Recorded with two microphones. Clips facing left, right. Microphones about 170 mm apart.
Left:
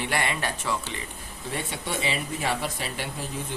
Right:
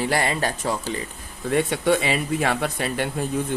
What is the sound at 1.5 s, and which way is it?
Speech, 60° right (ahead or behind).